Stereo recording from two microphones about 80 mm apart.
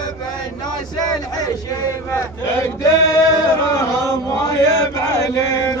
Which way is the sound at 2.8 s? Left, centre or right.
Left.